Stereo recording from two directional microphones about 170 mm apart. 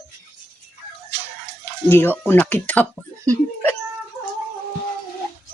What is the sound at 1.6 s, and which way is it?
Speech, 15° left (ahead or behind).